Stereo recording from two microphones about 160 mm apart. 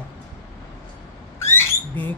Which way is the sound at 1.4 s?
15° left (ahead or behind).